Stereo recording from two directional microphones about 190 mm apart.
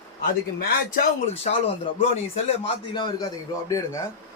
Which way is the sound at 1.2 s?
35° left (ahead or behind).